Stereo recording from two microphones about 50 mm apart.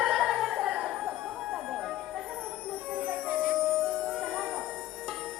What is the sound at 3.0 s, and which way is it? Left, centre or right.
Music, right.